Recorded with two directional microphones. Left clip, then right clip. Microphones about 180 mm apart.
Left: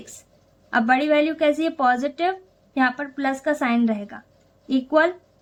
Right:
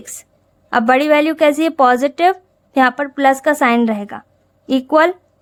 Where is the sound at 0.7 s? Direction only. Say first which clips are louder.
Right 6 dB; 50° right (ahead or behind).